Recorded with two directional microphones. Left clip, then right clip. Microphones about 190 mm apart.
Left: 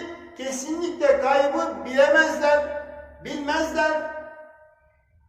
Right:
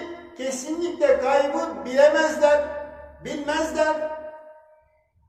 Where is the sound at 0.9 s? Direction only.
15° right (ahead or behind).